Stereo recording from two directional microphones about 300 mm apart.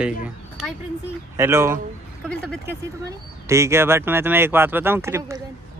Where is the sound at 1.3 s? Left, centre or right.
Centre.